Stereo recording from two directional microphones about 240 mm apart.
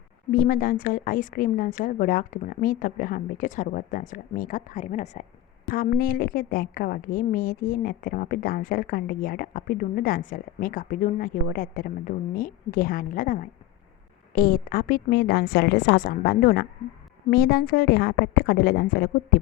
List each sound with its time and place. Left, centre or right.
0.3 s a woman's voice: left